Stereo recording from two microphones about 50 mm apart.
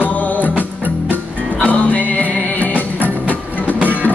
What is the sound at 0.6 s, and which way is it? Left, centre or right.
Music, right.